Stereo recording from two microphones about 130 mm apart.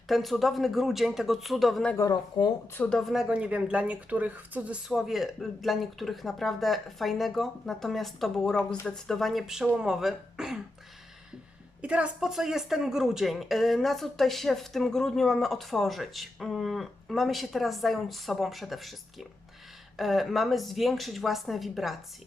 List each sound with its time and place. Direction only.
0.1 s speech: centre (ahead or behind)
2.0 s speech: 25° left (ahead or behind)
2.7 s speech: 10° left (ahead or behind)
3.0 s speech: centre (ahead or behind)
11.8 s speech: 10° right (ahead or behind)
20.0 s speech: centre (ahead or behind)